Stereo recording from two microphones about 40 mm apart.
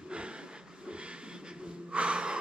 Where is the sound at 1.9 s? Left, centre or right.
Right.